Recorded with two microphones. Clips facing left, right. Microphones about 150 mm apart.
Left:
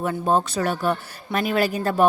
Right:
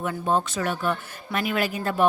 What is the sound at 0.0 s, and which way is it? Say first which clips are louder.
Speech: left 3 dB; 40° left (ahead or behind).